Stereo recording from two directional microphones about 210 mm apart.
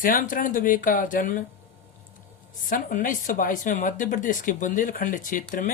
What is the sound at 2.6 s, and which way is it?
Speech, 40° left (ahead or behind).